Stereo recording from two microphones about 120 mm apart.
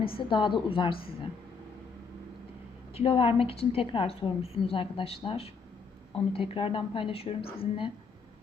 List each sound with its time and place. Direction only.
0.0 s a woman's voice: 45° left (ahead or behind)
2.9 s a woman's voice: 55° left (ahead or behind)